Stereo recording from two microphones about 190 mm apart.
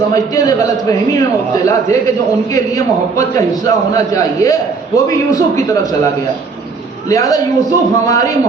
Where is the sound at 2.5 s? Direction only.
20° left (ahead or behind).